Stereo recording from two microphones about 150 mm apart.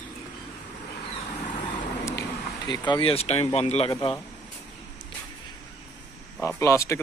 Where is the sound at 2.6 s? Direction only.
30° left (ahead or behind).